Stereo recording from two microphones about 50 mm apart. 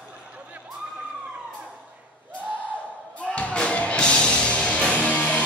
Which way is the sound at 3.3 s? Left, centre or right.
Left.